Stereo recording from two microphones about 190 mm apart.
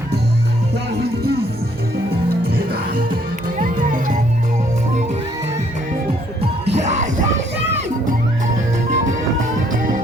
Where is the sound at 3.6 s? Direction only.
45° right (ahead or behind).